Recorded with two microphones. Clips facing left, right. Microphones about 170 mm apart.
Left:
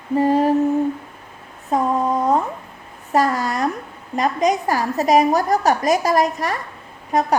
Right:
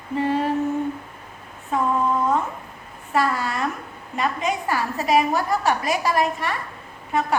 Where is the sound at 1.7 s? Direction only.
40° left (ahead or behind).